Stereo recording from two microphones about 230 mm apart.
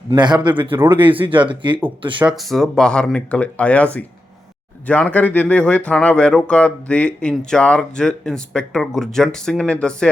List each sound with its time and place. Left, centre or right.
0.1 s a man's voice: centre
2.2 s speech: centre